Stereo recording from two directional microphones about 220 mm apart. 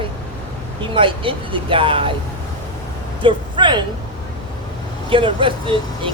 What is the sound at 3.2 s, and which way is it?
Speech, 20° right (ahead or behind).